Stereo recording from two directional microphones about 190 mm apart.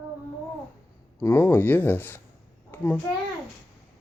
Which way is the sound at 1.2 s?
15° left (ahead or behind).